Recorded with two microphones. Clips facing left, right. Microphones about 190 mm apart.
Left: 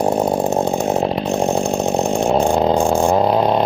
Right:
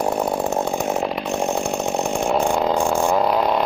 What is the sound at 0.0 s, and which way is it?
Chainsaw, 25° left (ahead or behind).